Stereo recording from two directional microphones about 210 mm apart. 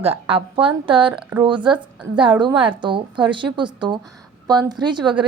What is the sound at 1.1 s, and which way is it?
Speech, 10° right (ahead or behind).